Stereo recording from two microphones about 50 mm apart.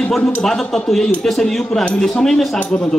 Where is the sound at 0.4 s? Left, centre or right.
Centre.